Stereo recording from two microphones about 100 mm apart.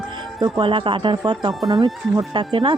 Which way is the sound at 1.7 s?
45° right (ahead or behind).